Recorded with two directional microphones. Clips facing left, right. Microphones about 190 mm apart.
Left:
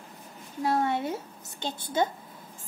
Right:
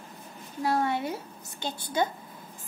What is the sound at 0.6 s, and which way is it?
A woman's voice, 25° left (ahead or behind).